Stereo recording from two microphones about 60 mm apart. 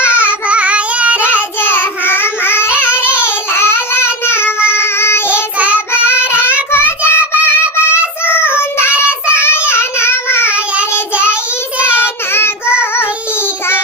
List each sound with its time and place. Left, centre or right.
0.3 s child singing: right
1.6 s child singing: left
2.6 s child singing: right
3.2 s child singing: left
4.8 s child singing: left
5.5 s child singing: right
6.3 s child singing: left
10.4 s child singing: right